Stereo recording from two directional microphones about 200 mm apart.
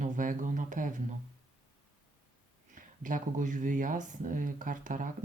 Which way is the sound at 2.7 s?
40° right (ahead or behind).